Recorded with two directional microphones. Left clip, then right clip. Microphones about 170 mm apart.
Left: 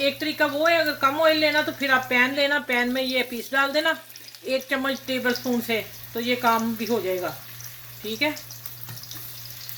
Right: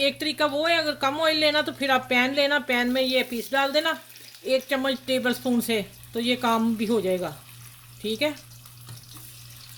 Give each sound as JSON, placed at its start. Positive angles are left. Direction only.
{"t": 0.0, "sound": "speech", "side_deg": -90}